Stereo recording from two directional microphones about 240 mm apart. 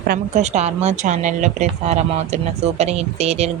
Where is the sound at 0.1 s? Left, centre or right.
Right.